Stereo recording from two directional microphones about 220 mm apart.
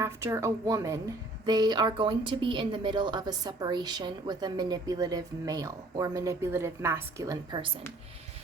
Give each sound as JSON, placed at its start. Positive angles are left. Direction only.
{"t": 0.0, "sound": "a woman's voice", "side_deg": -15}